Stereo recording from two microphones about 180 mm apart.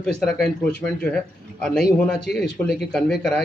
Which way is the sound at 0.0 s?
5° left (ahead or behind).